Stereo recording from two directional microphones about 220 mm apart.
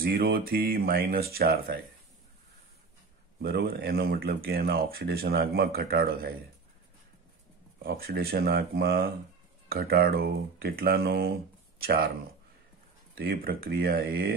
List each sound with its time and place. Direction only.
0.0 s speech: 45° right (ahead or behind)
3.3 s speech: 45° right (ahead or behind)
7.8 s speech: 45° right (ahead or behind)
13.1 s speech: 45° right (ahead or behind)